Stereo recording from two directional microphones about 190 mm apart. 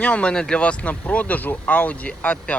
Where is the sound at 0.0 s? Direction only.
5° left (ahead or behind).